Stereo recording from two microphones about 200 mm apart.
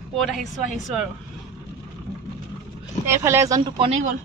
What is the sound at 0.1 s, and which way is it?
Speech, centre (ahead or behind).